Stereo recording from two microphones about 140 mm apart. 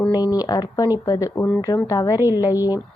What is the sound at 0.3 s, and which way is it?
A woman's voice, 25° left (ahead or behind).